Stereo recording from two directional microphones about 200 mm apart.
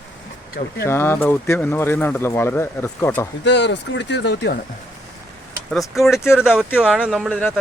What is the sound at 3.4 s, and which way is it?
Speech, 60° left (ahead or behind).